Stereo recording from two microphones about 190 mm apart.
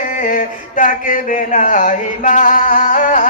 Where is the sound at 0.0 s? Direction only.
45° left (ahead or behind).